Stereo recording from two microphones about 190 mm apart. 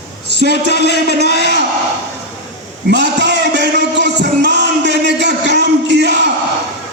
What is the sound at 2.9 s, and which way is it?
Music, 65° right (ahead or behind).